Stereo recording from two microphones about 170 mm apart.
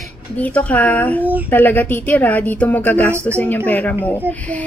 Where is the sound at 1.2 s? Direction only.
10° right (ahead or behind).